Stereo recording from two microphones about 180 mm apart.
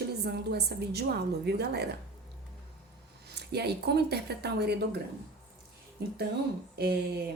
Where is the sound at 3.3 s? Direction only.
65° right (ahead or behind).